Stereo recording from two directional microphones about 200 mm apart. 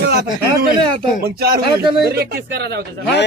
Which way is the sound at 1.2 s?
50° right (ahead or behind).